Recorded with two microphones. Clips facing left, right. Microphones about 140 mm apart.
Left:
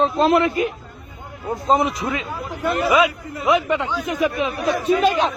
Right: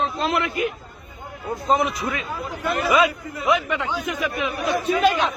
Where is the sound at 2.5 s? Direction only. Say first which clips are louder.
Left 3 dB; centre (ahead or behind).